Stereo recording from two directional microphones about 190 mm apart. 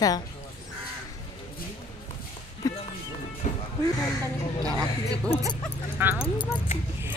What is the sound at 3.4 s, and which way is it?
Music, 40° left (ahead or behind).